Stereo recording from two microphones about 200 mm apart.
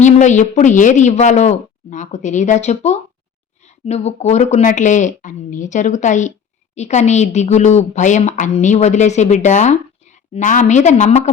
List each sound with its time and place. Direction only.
0.0 s speech: 35° left (ahead or behind)